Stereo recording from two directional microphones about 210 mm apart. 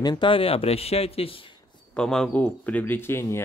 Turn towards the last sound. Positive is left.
turn(degrees=10)  # may be behind; listen again after turning